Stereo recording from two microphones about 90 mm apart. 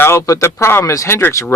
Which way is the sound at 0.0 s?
30° left (ahead or behind).